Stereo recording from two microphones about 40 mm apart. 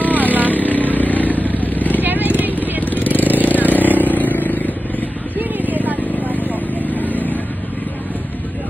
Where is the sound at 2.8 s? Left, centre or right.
Left.